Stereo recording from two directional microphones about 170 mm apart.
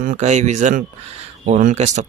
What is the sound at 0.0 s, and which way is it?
Speech, 45° right (ahead or behind).